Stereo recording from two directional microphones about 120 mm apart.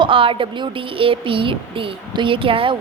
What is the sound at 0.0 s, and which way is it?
A woman's voice, 45° right (ahead or behind).